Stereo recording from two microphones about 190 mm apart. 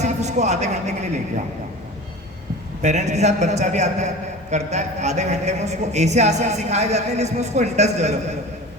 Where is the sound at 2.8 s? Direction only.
35° right (ahead or behind).